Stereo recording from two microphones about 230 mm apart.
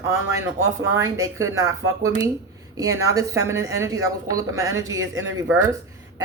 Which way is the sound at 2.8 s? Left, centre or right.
Centre.